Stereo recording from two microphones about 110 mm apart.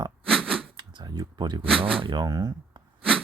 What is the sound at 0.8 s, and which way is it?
Speech, 40° right (ahead or behind).